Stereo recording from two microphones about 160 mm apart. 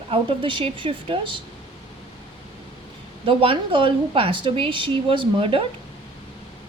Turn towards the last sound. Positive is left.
turn(degrees=-35)  # may be behind; listen again after turning